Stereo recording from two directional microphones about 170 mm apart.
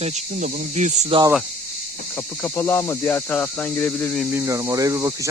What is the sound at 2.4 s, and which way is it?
Speech, 10° left (ahead or behind).